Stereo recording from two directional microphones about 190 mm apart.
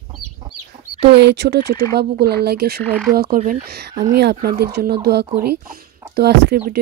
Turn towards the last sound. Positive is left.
turn(degrees=-60)  # may be behind; listen again after turning